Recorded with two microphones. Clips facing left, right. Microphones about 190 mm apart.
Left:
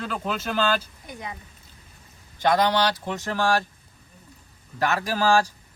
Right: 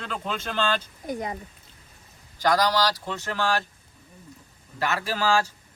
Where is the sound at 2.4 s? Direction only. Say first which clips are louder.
Left 1 dB; 25° left (ahead or behind).